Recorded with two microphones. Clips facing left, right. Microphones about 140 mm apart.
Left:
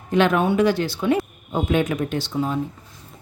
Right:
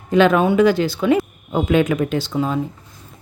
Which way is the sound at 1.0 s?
90° right.